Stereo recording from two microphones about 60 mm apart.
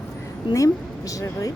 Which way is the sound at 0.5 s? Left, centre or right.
Left.